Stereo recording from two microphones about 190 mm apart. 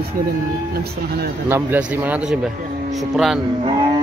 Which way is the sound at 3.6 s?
25° right (ahead or behind).